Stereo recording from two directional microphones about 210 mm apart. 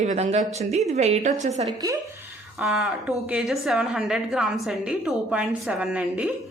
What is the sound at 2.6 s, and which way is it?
A woman's voice, 5° right (ahead or behind).